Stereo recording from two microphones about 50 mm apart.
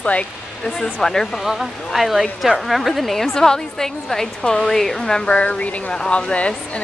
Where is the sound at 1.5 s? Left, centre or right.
Centre.